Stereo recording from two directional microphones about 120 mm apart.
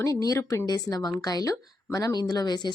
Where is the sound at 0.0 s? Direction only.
30° left (ahead or behind).